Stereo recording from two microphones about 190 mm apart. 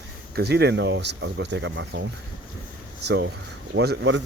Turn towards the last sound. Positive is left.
turn(degrees=-70)  # may be behind; listen again after turning